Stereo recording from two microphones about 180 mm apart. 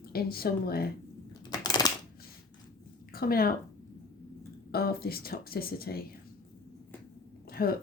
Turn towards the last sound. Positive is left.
turn(degrees=55)  # may be behind; listen again after turning